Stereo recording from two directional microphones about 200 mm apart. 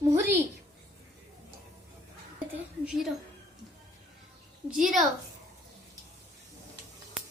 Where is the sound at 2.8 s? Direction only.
5° right (ahead or behind).